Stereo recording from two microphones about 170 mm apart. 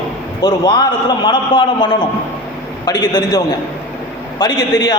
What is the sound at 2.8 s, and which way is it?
Speech, 25° left (ahead or behind).